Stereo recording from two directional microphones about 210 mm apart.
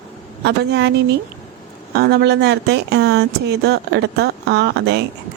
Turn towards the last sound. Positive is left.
turn(degrees=-55)  # may be behind; listen again after turning